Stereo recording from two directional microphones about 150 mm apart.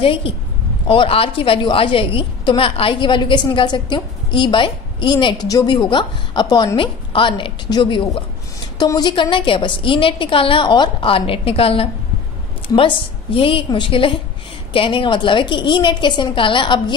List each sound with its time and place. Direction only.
0.0 s a woman's voice: 35° left (ahead or behind)